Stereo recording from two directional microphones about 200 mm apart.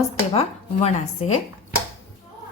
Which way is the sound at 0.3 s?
35° left (ahead or behind).